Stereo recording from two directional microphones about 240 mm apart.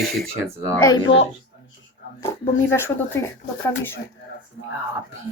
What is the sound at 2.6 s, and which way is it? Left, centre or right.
Speech, centre.